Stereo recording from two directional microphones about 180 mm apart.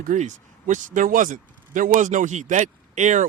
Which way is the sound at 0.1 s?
45° right (ahead or behind).